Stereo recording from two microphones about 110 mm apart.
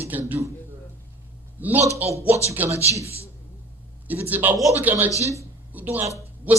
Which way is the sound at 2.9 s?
65° right (ahead or behind).